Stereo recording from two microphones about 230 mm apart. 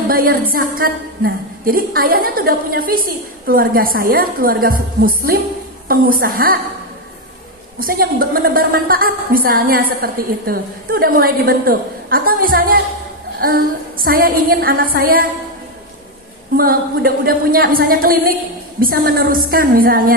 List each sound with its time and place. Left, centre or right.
0.1 s a woman's voice: right
7.8 s a woman's voice: right
16.5 s a woman's voice: right